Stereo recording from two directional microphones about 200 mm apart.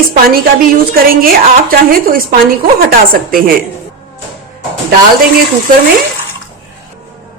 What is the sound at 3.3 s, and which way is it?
Speech, 45° right (ahead or behind).